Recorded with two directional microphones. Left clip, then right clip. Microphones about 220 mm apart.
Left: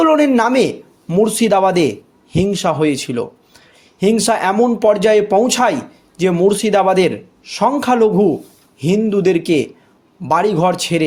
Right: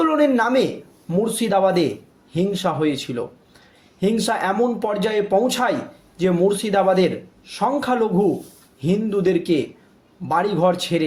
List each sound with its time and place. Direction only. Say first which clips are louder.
0.0 s a man's voice: left 5 dB; 35° left (ahead or behind)